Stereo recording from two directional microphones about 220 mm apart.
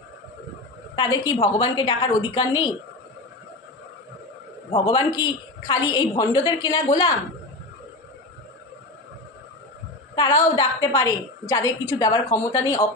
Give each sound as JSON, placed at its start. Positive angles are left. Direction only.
{"t": 0.9, "sound": "a woman's voice", "side_deg": 15}
{"t": 4.8, "sound": "a woman's voice", "side_deg": 20}
{"t": 10.1, "sound": "a woman's voice", "side_deg": 15}